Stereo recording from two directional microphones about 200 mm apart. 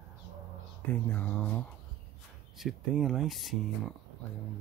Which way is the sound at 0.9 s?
10° left (ahead or behind).